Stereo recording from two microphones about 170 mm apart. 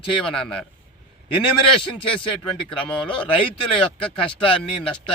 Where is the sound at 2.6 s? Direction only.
5° left (ahead or behind).